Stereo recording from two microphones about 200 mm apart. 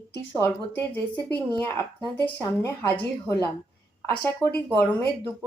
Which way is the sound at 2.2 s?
10° left (ahead or behind).